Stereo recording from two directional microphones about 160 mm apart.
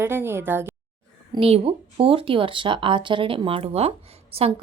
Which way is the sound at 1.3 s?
35° right (ahead or behind).